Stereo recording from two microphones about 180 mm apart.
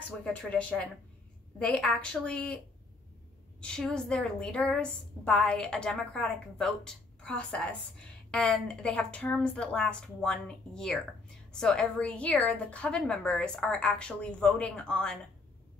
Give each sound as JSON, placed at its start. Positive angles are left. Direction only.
{"t": 0.2, "sound": "a woman's voice", "side_deg": 5}
{"t": 3.6, "sound": "a woman's voice", "side_deg": 5}